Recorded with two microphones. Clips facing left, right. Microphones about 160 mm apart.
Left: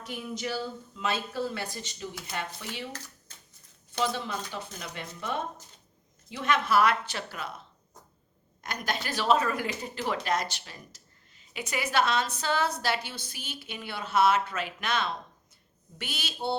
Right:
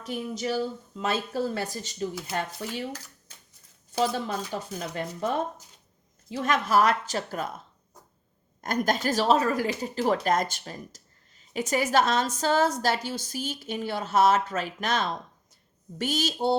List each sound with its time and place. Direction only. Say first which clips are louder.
0.0 s a woman's voice: right 4 dB; 35° right (ahead or behind)
4.0 s a woman's voice: right 3 dB; 40° right (ahead or behind)
8.6 s speech: right 8 dB; 45° right (ahead or behind)